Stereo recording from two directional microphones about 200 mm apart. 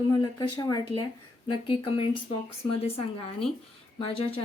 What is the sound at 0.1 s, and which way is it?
Speech, 20° left (ahead or behind).